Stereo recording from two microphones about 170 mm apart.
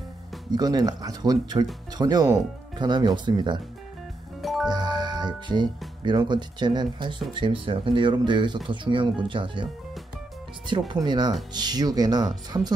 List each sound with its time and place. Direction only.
0.5 s speech: 25° right (ahead or behind)
4.4 s music: centre (ahead or behind)
4.6 s music: 25° right (ahead or behind)
6.0 s speech: 25° right (ahead or behind)
10.9 s speech: 25° right (ahead or behind)